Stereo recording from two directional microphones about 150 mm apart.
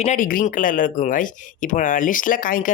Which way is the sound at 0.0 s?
60° left (ahead or behind).